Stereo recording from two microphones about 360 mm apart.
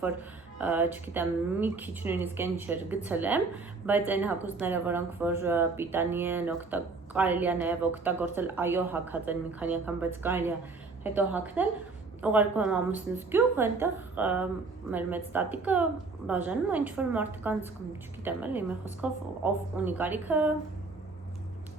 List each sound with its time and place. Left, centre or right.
0.0 s a woman's voice: centre